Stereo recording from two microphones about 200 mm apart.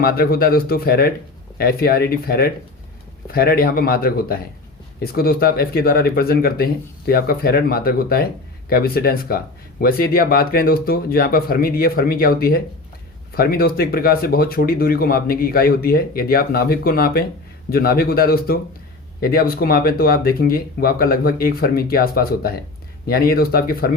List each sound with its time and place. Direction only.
0.0 s speech: 50° left (ahead or behind)